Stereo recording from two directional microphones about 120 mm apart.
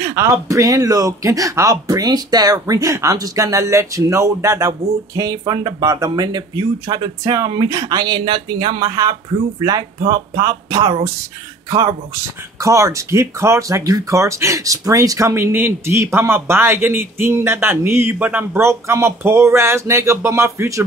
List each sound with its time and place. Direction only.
0.0 s speech: 25° right (ahead or behind)
12.5 s speech: 25° right (ahead or behind)